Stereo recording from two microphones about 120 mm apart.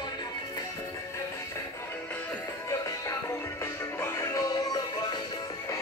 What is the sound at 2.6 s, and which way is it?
Music, 25° left (ahead or behind).